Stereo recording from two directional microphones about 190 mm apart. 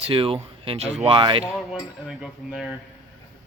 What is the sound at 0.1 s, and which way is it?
Speech, 30° right (ahead or behind).